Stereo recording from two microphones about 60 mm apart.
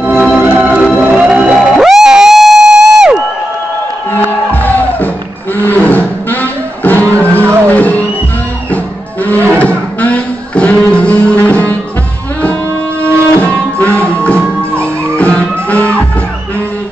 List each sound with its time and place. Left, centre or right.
0.4 s organ: right
1.1 s music: centre
4.5 s music: left
5.6 s roar: left
7.2 s music: left
13.0 s music: left